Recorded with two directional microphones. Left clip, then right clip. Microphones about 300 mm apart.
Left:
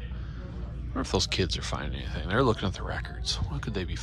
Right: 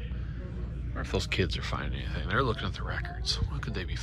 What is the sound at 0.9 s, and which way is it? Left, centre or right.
Speech, centre.